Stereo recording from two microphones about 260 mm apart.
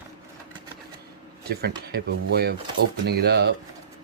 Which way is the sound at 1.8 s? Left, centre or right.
Right.